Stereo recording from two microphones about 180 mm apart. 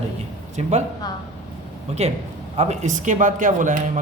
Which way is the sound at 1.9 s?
35° right (ahead or behind).